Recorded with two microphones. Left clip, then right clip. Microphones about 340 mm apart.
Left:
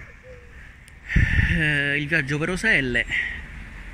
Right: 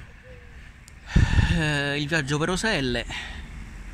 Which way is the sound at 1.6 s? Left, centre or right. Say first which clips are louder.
Left 2 dB; centre.